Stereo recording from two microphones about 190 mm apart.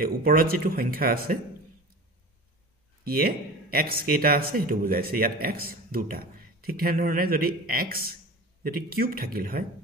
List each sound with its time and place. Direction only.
0.0 s speech: 50° right (ahead or behind)
3.0 s speech: 50° right (ahead or behind)